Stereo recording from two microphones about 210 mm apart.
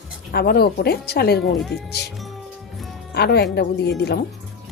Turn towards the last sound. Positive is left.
turn(degrees=50)  # may be behind; listen again after turning